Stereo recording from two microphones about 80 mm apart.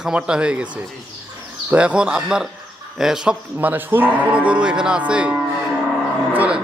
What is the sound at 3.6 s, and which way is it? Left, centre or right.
Cattle, right.